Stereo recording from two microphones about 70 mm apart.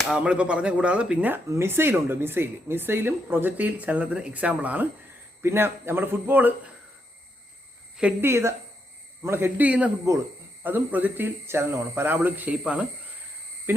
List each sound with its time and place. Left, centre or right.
0.1 s speech: centre
1.5 s speech: right
5.4 s speech: right
8.2 s speech: right
9.6 s speech: centre
12.5 s speech: centre
13.7 s a sound: right